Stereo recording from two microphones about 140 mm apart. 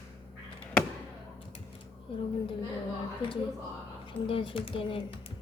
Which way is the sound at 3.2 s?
35° left (ahead or behind).